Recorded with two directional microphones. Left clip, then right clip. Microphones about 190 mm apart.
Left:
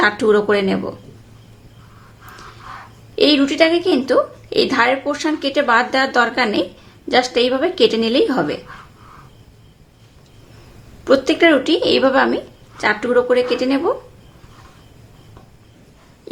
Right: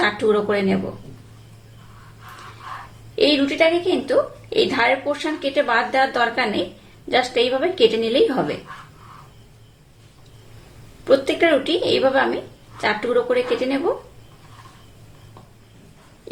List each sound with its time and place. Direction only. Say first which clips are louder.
0.0 s speech: left 4 dB; 30° left (ahead or behind)
3.2 s a woman's voice: left 3 dB; 25° left (ahead or behind)
11.0 s a woman's voice: left 3 dB; 30° left (ahead or behind)